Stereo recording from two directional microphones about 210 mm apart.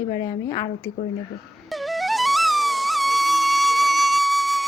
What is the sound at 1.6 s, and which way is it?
Flute, centre (ahead or behind).